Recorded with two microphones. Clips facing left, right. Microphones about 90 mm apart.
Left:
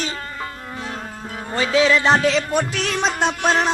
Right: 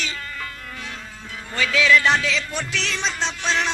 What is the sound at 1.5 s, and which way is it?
Music, 30° left (ahead or behind).